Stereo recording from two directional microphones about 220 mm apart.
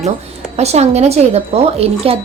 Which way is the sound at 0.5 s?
30° right (ahead or behind).